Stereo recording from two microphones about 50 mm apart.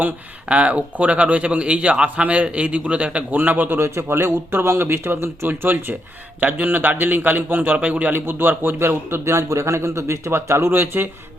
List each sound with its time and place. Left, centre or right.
0.4 s speech: right
3.3 s a man's voice: right
3.8 s speech: right
5.5 s a man's voice: right
8.1 s a man's voice: right
9.3 s speech: right